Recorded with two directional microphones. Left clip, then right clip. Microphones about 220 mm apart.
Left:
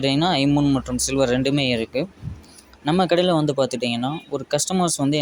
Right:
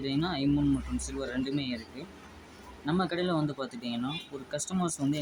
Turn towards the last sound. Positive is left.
turn(degrees=25)  # may be behind; listen again after turning